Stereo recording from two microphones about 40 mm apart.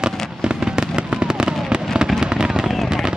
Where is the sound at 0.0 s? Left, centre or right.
Right.